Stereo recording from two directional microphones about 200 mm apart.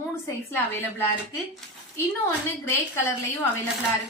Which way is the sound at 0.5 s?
10° left (ahead or behind).